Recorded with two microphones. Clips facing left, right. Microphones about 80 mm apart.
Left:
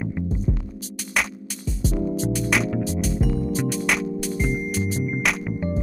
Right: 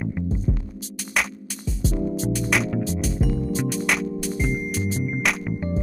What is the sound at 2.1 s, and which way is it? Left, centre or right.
Music, centre.